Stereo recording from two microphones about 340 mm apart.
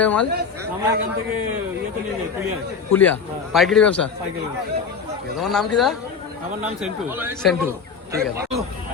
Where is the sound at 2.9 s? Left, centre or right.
Centre.